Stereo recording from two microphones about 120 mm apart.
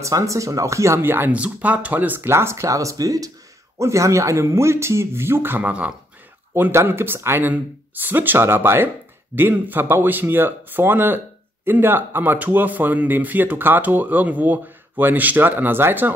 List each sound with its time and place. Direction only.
0.0 s speech: 25° right (ahead or behind)